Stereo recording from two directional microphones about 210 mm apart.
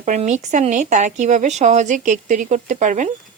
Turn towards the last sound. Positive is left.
turn(degrees=-35)  # may be behind; listen again after turning